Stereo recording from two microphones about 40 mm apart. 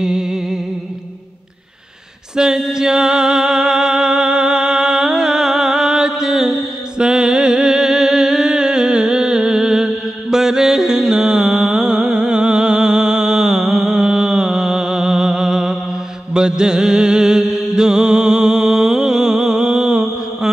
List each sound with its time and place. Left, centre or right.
0.0 s music: centre
2.3 s music: centre